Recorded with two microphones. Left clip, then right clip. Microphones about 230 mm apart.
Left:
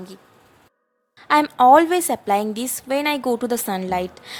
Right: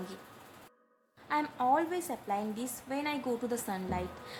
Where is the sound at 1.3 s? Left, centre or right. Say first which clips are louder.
Left 17 dB; left.